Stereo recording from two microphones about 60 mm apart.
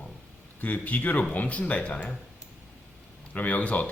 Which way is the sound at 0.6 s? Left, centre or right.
Left.